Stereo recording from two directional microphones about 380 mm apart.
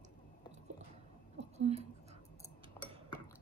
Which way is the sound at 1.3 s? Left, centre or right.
Centre.